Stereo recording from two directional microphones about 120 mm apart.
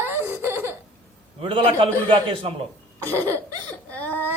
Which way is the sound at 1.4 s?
45° right (ahead or behind).